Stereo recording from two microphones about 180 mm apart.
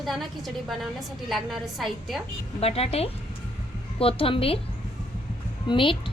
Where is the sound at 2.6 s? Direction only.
35° left (ahead or behind).